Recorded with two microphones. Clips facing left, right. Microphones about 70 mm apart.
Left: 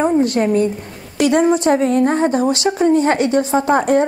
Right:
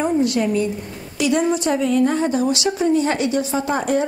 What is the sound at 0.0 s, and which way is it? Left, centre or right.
A woman's voice, left.